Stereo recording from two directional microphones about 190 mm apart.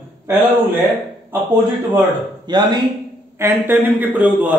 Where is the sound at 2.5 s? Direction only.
25° right (ahead or behind).